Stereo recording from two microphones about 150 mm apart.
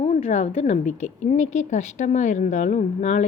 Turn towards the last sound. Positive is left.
turn(degrees=50)  # may be behind; listen again after turning